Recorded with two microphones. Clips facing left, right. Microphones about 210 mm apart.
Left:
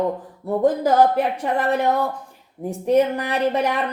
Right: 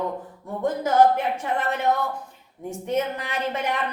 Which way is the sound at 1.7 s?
35° left (ahead or behind).